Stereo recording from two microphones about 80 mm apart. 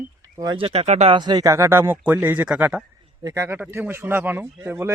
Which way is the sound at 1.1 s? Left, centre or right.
Right.